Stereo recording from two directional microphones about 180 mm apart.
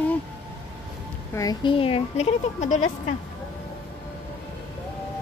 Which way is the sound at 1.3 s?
20° left (ahead or behind).